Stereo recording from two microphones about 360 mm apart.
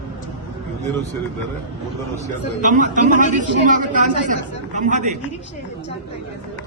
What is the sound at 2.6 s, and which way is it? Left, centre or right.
Speech, right.